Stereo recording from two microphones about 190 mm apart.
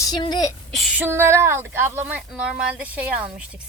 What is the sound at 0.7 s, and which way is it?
Speech, 10° right (ahead or behind).